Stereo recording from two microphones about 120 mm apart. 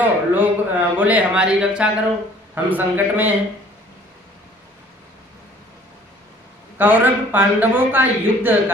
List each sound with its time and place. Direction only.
0.0 s speech: 15° right (ahead or behind)
6.8 s speech: 15° right (ahead or behind)